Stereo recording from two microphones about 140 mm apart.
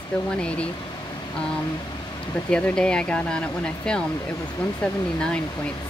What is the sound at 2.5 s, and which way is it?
Speech, 5° left (ahead or behind).